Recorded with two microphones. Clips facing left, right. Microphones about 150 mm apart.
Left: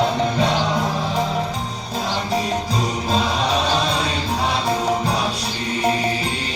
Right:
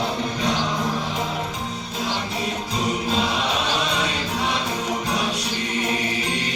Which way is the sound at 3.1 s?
35° left (ahead or behind).